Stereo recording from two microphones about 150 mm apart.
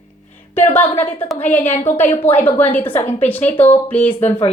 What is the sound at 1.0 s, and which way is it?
Speech, 10° left (ahead or behind).